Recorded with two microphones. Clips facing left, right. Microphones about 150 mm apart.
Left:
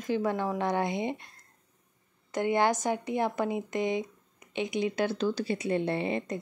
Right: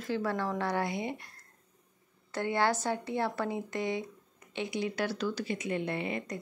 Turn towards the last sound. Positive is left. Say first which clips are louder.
# left 4 dB
turn(degrees=25)  # may be behind; listen again after turning